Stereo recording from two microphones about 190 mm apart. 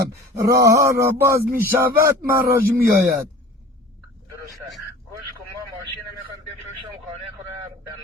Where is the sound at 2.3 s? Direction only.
50° right (ahead or behind).